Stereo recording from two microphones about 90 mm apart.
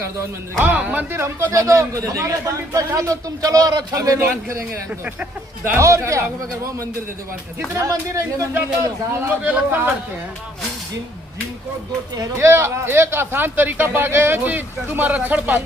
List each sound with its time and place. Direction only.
0.6 s speech: 15° right (ahead or behind)
1.2 s a man's voice: 30° right (ahead or behind)
4.9 s speech: 15° right (ahead or behind)
5.7 s a man's voice: 30° right (ahead or behind)
7.8 s a man's voice: 35° right (ahead or behind)
9.2 s speech: 15° right (ahead or behind)
12.4 s speech: 25° right (ahead or behind)